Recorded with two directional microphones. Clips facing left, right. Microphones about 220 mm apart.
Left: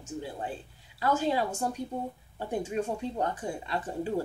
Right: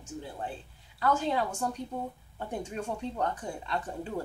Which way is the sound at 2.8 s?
15° left (ahead or behind).